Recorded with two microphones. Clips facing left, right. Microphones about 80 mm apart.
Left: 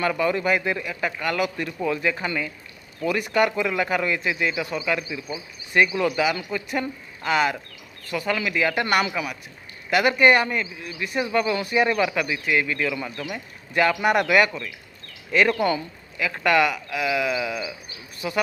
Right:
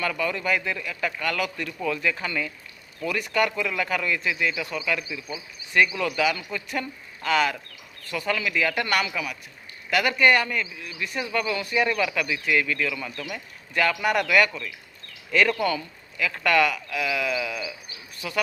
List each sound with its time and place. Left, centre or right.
0.0 s a man's voice: left
11.0 s a man's voice: centre